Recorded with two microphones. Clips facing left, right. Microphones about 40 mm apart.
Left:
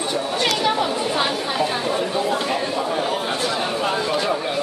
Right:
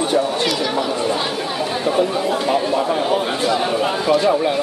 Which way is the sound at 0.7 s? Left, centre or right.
Centre.